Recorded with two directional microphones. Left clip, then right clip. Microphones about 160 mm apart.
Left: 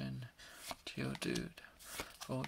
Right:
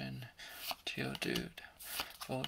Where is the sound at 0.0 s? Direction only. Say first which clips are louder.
Right 3 dB; 40° left (ahead or behind).